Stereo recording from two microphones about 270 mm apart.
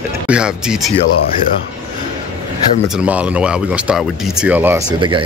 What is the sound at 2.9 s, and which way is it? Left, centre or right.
Speech, centre.